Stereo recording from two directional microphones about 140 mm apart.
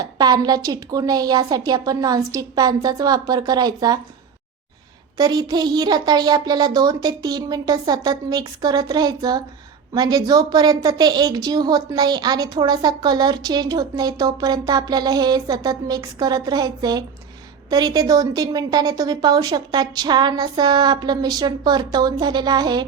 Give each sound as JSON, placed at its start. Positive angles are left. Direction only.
{"t": 0.0, "sound": "a woman's voice", "side_deg": -30}
{"t": 5.1, "sound": "a woman's voice", "side_deg": -30}